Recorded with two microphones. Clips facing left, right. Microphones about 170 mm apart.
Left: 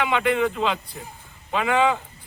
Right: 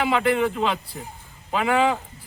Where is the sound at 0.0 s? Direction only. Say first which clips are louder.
Right 1 dB; 35° right (ahead or behind).